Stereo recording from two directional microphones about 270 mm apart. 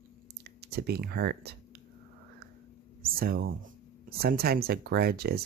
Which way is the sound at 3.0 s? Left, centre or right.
Right.